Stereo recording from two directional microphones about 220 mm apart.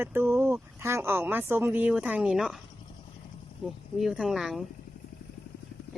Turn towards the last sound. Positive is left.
turn(degrees=0)  # may be behind; listen again after turning